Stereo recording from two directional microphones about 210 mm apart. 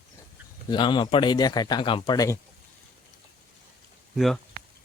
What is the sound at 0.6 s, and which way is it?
Speech, 20° left (ahead or behind).